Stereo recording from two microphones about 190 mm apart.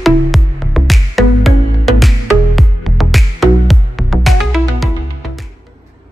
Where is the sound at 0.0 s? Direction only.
Centre (ahead or behind).